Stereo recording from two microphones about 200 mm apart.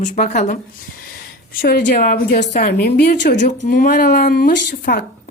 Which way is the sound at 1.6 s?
50° left (ahead or behind).